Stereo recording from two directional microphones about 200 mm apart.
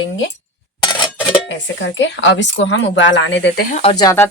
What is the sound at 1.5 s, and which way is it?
Speech, 65° left (ahead or behind).